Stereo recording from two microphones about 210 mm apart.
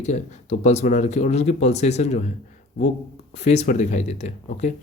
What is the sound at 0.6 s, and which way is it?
Speech, 30° left (ahead or behind).